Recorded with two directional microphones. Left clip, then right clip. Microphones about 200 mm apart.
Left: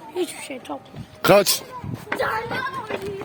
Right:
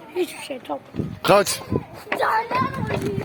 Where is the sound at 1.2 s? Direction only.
70° left (ahead or behind).